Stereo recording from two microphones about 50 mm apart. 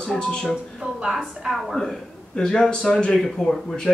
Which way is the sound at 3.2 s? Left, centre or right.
Centre.